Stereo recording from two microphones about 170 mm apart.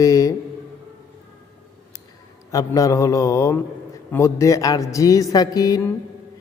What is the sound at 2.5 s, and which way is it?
A man's voice, 20° left (ahead or behind).